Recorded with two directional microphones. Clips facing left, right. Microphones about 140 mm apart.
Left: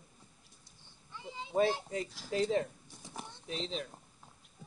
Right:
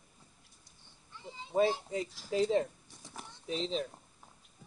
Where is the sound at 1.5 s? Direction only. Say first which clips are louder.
Right 1 dB; centre (ahead or behind).